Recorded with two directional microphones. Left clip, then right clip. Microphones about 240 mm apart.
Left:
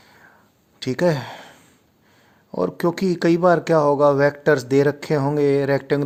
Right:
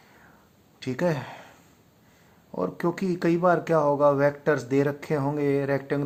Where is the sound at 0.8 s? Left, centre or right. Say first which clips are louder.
Left 7 dB; left.